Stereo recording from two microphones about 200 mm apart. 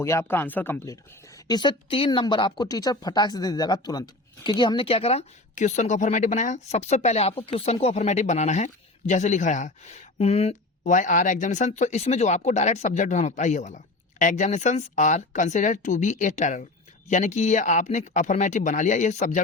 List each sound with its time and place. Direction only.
0.0 s speech: 15° left (ahead or behind); by 19.4 s 35° left (ahead or behind)